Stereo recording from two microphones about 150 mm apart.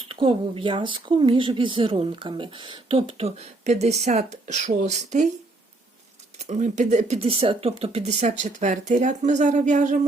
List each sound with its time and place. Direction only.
0.1 s speech: 35° right (ahead or behind); by 5.2 s 55° right (ahead or behind)
6.4 s speech: 50° right (ahead or behind)